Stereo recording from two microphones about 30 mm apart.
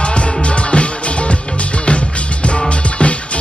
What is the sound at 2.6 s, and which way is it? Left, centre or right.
Music, left.